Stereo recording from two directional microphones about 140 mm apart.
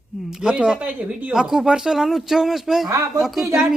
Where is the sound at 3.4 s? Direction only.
20° right (ahead or behind).